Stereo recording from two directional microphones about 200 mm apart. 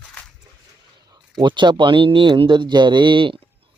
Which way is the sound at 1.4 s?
25° right (ahead or behind).